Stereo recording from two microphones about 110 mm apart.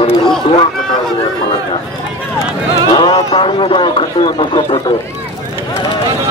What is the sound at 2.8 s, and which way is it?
Speech, 40° left (ahead or behind).